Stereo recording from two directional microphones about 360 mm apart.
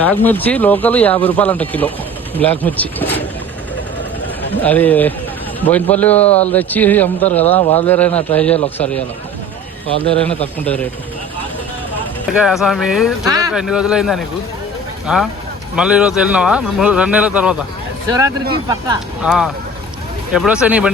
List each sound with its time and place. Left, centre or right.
0.0 s a man's voice: centre
4.6 s a man's voice: centre
6.2 s speech: centre
6.5 s a man's voice: centre
10.0 s a man's voice: centre
12.4 s a man's voice: centre